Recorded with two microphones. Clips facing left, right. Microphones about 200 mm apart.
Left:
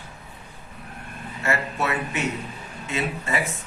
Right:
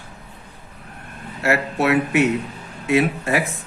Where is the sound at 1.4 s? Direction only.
70° right (ahead or behind).